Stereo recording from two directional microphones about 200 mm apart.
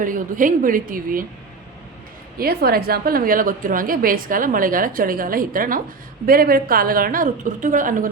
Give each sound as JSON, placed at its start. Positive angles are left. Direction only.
{"t": 0.0, "sound": "a woman's voice", "side_deg": -40}
{"t": 2.4, "sound": "a woman's voice", "side_deg": -50}